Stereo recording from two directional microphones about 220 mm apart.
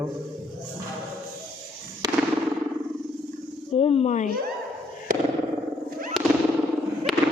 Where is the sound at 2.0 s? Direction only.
15° right (ahead or behind).